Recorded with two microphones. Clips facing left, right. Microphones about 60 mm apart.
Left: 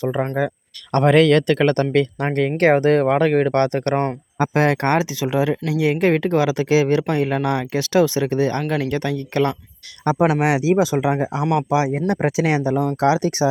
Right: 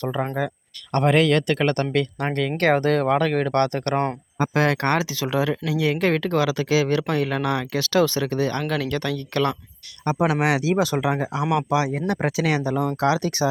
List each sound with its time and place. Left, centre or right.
0.2 s speech: centre
0.9 s speech: left
3.9 s speech: centre
4.5 s speech: left
11.2 s speech: left